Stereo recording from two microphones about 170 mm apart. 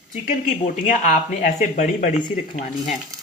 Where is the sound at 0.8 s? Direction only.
50° left (ahead or behind).